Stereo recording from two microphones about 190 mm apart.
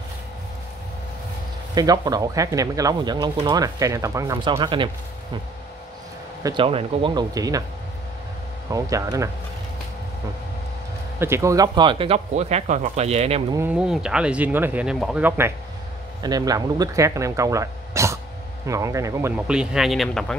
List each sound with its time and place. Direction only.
1.8 s speech: 20° right (ahead or behind)
6.4 s speech: 25° right (ahead or behind)
8.7 s speech: 15° right (ahead or behind)
11.1 s speech: 15° right (ahead or behind); by 13.4 s 35° right (ahead or behind)
13.5 s speech: 10° right (ahead or behind)